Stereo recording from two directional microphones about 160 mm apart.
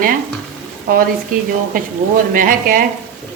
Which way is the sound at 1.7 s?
60° right (ahead or behind).